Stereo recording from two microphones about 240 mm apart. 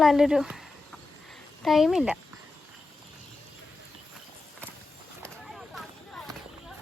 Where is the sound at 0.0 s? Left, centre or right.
Centre.